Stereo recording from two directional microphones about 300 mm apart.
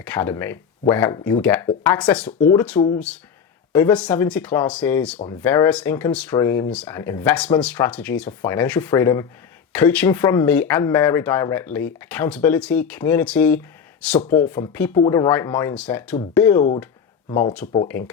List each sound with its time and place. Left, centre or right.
0.0 s speech: centre